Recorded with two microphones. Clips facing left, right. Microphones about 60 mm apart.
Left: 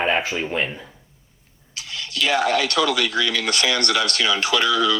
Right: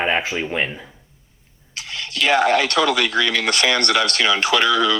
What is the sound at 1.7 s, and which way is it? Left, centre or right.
Speech, right.